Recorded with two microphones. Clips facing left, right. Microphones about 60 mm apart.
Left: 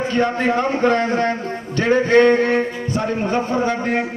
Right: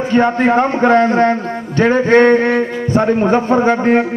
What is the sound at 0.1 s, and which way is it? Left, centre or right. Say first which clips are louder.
A man's voice: right 8 dB; right.